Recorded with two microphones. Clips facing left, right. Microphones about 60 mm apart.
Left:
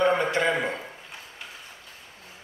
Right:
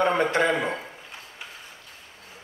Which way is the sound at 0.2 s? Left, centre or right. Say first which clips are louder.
Right 3 dB; right.